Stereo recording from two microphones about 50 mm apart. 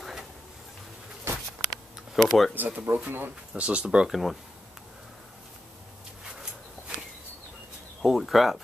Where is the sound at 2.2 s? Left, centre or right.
Centre.